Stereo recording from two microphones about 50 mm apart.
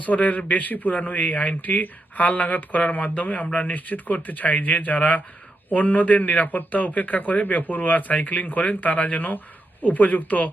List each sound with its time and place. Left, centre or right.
0.0 s speech: left